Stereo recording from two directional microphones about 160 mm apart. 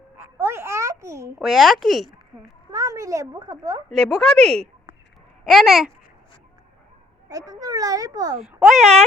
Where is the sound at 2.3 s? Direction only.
20° right (ahead or behind).